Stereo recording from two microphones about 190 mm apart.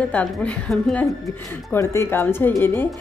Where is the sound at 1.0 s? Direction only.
15° left (ahead or behind).